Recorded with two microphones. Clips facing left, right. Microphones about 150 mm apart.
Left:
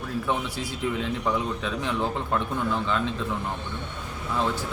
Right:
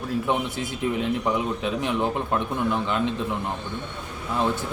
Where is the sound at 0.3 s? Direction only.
20° right (ahead or behind).